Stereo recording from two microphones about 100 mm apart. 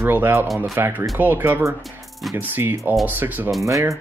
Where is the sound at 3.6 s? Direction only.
30° right (ahead or behind).